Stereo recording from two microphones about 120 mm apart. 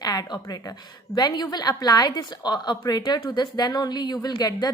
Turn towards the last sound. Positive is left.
turn(degrees=35)  # may be behind; listen again after turning